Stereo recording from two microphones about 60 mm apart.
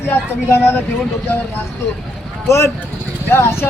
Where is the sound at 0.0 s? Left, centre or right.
Left.